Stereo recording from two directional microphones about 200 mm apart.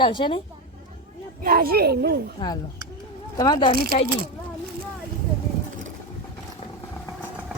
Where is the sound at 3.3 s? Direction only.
20° left (ahead or behind).